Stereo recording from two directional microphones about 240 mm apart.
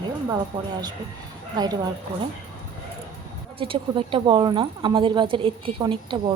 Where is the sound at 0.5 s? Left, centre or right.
Centre.